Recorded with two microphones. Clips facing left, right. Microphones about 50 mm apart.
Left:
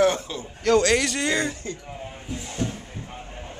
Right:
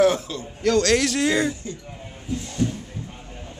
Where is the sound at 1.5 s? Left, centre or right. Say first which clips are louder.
Right 1 dB; left.